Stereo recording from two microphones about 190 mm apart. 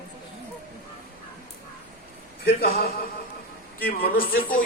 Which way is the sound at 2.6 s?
50° left (ahead or behind).